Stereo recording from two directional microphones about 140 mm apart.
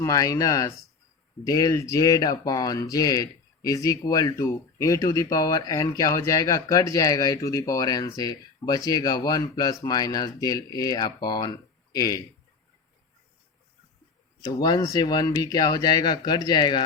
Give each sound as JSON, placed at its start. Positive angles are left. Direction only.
{"t": 0.0, "sound": "speech", "side_deg": 25}
{"t": 14.4, "sound": "speech", "side_deg": 30}